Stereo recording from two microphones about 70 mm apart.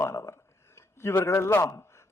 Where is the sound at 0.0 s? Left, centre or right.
Left.